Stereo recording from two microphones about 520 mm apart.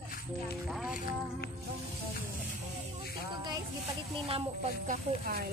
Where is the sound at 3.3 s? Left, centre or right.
Centre.